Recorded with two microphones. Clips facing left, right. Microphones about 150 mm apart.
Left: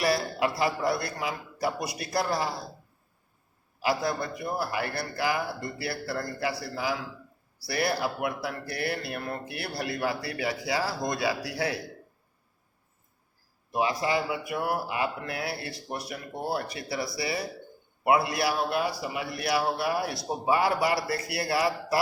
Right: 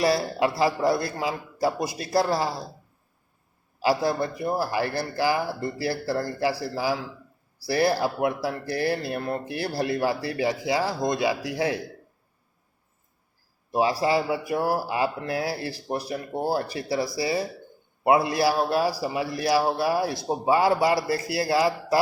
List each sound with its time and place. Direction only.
0.0 s speech: 25° right (ahead or behind)
3.8 s speech: 30° right (ahead or behind)
13.7 s speech: 30° right (ahead or behind)